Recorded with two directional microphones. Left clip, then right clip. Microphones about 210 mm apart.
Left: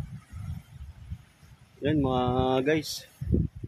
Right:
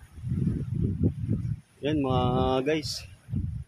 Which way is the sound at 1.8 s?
5° left (ahead or behind).